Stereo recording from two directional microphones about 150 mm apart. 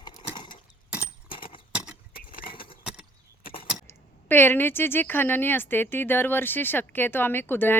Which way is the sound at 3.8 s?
15° left (ahead or behind).